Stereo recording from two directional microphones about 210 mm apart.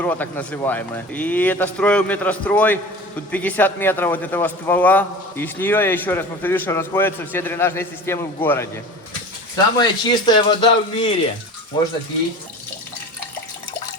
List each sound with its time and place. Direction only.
0.0 s a man's voice: 10° left (ahead or behind)
9.7 s speech: 20° left (ahead or behind)